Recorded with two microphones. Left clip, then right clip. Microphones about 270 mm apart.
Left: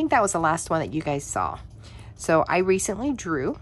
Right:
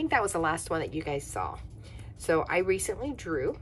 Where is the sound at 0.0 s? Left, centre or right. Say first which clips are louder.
Left 6 dB; left.